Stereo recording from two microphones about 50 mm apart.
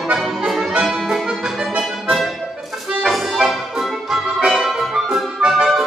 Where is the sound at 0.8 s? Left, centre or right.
Centre.